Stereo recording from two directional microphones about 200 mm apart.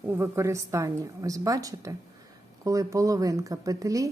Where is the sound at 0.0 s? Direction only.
15° right (ahead or behind).